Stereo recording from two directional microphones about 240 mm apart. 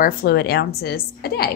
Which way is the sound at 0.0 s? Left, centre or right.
Left.